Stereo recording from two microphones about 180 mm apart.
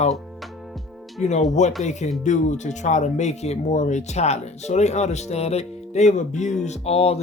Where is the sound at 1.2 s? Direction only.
40° left (ahead or behind).